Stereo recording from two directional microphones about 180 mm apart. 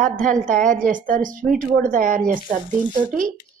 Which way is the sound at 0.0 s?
45° right (ahead or behind).